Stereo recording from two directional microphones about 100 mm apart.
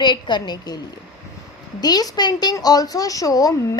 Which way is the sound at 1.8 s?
40° left (ahead or behind).